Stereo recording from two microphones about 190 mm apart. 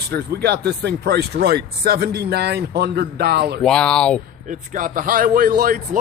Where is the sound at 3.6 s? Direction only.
5° left (ahead or behind).